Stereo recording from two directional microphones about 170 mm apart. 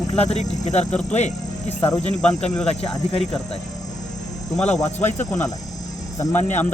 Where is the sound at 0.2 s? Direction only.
40° left (ahead or behind).